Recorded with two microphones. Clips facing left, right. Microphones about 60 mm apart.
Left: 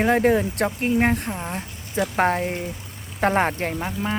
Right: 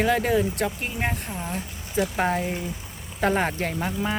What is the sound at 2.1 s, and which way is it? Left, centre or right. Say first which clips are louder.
Speech: left 3 dB; left.